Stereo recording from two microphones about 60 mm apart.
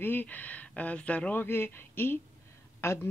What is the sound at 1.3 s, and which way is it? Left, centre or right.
Speech, left.